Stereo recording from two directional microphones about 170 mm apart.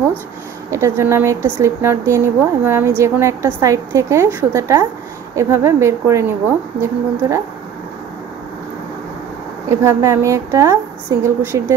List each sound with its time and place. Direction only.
0.7 s speech: 15° right (ahead or behind)
9.8 s speech: 15° right (ahead or behind)